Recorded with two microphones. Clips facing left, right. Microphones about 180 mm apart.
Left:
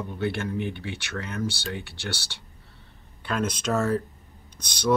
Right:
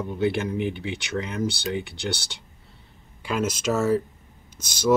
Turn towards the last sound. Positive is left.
turn(degrees=-5)  # may be behind; listen again after turning